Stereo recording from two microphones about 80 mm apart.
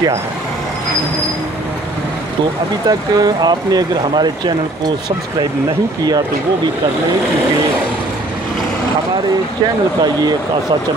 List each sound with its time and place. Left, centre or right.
2.9 s speech: right